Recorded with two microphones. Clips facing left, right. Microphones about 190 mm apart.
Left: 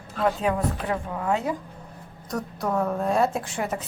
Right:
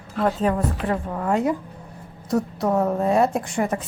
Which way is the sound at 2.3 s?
25° right (ahead or behind).